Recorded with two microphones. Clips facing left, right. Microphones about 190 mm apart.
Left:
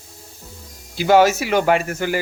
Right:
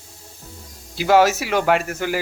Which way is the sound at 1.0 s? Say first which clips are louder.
Left 1 dB; centre (ahead or behind).